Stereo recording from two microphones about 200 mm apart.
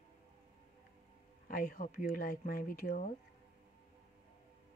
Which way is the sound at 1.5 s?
40° left (ahead or behind).